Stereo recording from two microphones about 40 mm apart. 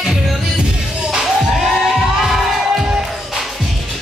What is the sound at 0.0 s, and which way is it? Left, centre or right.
Music, centre.